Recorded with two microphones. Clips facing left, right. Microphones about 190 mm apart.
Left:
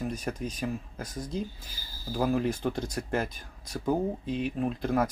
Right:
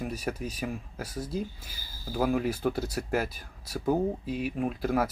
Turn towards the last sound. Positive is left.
turn(degrees=-5)  # may be behind; listen again after turning